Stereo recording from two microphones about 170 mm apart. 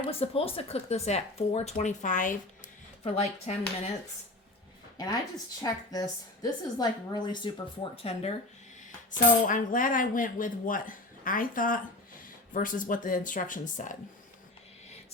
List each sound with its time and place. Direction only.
0.1 s speech: 35° left (ahead or behind)
5.9 s speech: 20° left (ahead or behind)
9.1 s speech: 50° left (ahead or behind)